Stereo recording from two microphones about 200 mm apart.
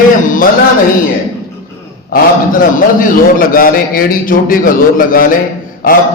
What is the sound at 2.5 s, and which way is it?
A man's voice, 45° left (ahead or behind).